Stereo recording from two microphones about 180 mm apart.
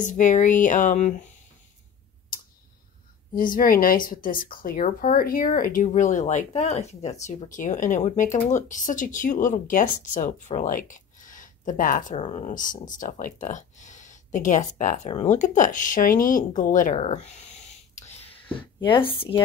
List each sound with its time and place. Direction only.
0.0 s speech: 45° left (ahead or behind)
3.3 s speech: 50° left (ahead or behind)
18.8 s speech: 25° left (ahead or behind)